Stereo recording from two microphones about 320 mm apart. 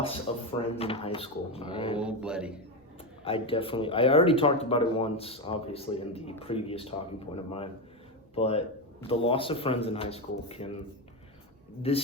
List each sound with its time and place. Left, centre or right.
0.3 s a man's voice: centre
2.0 s speech: centre
3.2 s a man's voice: centre
11.8 s speech: centre